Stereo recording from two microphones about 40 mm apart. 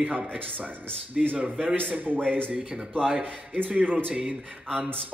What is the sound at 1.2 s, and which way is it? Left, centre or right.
Speech, centre.